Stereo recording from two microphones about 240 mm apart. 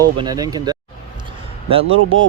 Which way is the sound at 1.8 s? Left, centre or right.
Right.